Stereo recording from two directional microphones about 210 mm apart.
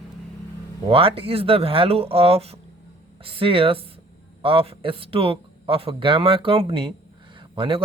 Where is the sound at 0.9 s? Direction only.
25° right (ahead or behind).